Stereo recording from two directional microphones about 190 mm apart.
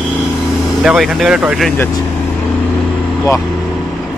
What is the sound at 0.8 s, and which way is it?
Speech, centre (ahead or behind).